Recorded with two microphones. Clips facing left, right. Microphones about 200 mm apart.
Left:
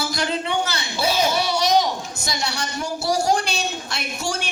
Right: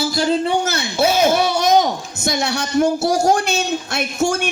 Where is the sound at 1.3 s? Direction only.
55° right (ahead or behind).